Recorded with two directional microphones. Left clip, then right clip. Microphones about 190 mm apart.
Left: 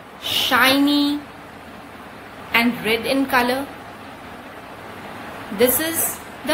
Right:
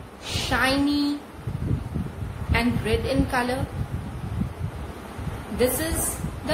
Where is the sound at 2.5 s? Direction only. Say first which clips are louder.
Left 6 dB; 5° right (ahead or behind).